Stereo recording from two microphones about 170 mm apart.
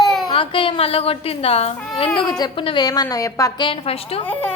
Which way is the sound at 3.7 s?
35° left (ahead or behind).